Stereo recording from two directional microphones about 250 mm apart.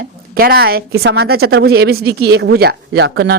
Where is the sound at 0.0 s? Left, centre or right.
Right.